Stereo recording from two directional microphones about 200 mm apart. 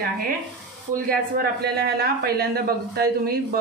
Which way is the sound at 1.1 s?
50° right (ahead or behind).